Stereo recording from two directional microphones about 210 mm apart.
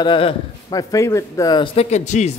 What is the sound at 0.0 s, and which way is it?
Speech, 25° left (ahead or behind).